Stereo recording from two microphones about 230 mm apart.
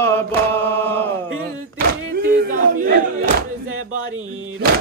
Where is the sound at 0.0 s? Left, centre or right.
Centre.